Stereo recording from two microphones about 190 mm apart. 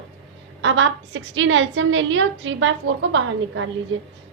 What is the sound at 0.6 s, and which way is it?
A woman's voice, 80° right.